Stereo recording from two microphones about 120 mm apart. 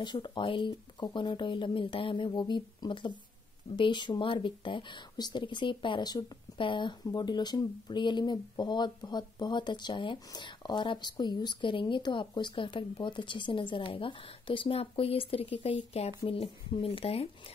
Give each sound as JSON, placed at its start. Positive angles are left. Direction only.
{"t": 0.0, "sound": "speech", "side_deg": 40}